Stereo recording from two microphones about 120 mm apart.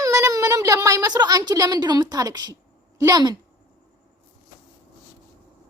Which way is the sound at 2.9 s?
30° right (ahead or behind).